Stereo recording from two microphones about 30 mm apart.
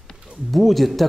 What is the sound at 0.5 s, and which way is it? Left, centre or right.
Speech, centre.